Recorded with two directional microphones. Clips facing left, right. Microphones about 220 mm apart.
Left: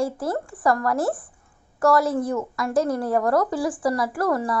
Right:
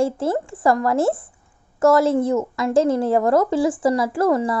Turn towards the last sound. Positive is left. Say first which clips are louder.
# right 5 dB
turn(degrees=-25)  # may be behind; listen again after turning